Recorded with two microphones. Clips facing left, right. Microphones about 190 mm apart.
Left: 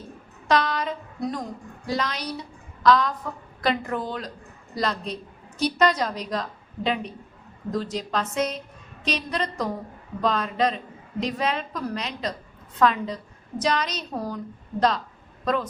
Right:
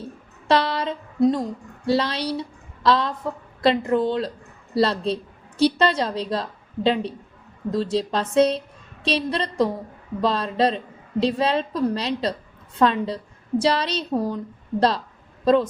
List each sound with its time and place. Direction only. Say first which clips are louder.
0.4 s a woman's voice: right 2 dB; 30° right (ahead or behind)